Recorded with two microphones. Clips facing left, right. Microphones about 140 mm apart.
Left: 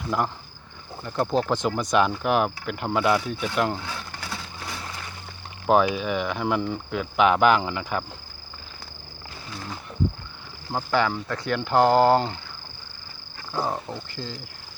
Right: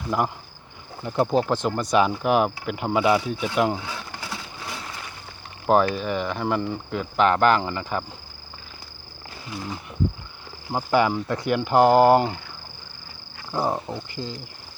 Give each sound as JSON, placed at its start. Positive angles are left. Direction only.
{"t": 0.1, "sound": "speech", "side_deg": 0}
{"t": 5.6, "sound": "speech", "side_deg": 0}
{"t": 9.5, "sound": "speech", "side_deg": -15}
{"t": 13.5, "sound": "speech", "side_deg": -15}